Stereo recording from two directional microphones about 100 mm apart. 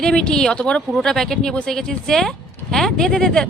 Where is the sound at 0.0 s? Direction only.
10° left (ahead or behind).